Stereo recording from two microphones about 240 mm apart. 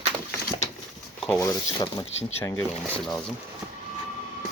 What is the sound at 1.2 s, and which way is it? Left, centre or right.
Speech, centre.